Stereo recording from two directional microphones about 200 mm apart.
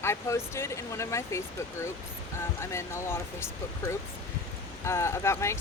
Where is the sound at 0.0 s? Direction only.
15° left (ahead or behind).